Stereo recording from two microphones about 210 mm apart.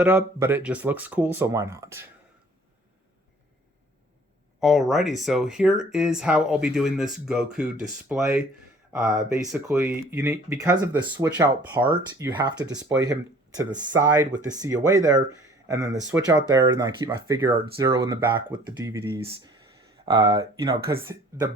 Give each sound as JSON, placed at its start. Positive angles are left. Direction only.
{"t": 0.0, "sound": "speech", "side_deg": -10}
{"t": 4.6, "sound": "speech", "side_deg": 0}